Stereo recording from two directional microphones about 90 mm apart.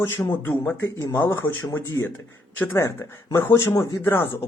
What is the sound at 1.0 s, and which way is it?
Speech, 50° left (ahead or behind).